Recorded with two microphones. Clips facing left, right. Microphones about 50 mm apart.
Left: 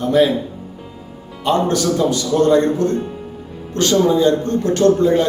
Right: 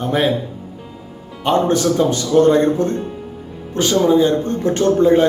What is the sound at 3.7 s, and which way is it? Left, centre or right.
A man's voice, centre.